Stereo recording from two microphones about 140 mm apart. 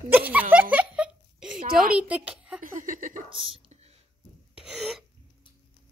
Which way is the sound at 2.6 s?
70° right (ahead or behind).